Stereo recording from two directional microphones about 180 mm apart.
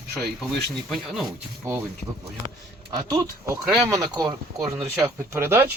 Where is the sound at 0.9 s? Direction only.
Centre (ahead or behind).